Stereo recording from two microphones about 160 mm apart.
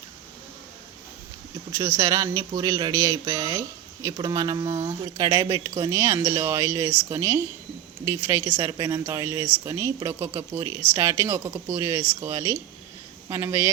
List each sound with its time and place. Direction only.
1.8 s speech: 20° right (ahead or behind)